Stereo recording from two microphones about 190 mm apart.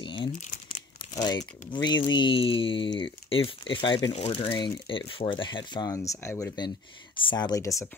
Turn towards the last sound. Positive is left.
turn(degrees=15)  # may be behind; listen again after turning